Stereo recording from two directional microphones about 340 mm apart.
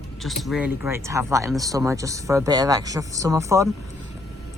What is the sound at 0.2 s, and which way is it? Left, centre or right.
Speech, centre.